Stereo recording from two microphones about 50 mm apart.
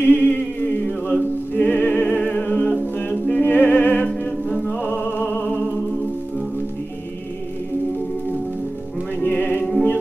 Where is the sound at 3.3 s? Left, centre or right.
Left.